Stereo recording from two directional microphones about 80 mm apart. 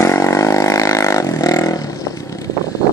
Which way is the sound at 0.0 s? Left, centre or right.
Left.